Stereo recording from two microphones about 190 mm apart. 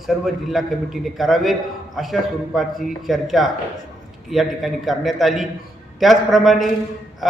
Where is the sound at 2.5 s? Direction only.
Centre (ahead or behind).